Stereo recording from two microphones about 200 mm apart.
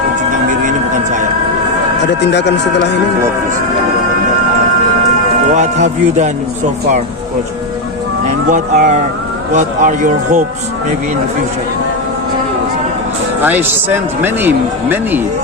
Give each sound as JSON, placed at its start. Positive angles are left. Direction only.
{"t": 0.6, "sound": "a sound", "side_deg": -40}
{"t": 2.2, "sound": "speech", "side_deg": 60}
{"t": 5.5, "sound": "speech", "side_deg": -35}
{"t": 8.4, "sound": "speech", "side_deg": -40}
{"t": 13.4, "sound": "speech", "side_deg": -10}